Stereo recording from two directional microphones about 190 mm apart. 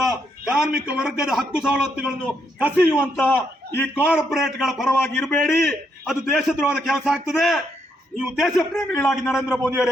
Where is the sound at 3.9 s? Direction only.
5° right (ahead or behind).